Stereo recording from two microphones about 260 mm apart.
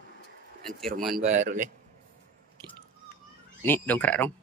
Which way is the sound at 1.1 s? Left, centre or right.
Right.